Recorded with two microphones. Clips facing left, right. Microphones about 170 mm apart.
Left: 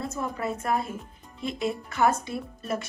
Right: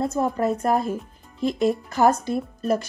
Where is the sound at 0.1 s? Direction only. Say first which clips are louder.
Right 8 dB; 40° right (ahead or behind).